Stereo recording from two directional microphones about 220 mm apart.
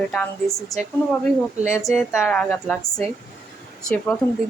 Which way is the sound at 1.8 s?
Centre (ahead or behind).